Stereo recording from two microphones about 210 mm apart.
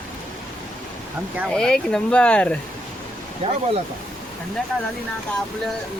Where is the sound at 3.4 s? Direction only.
30° right (ahead or behind).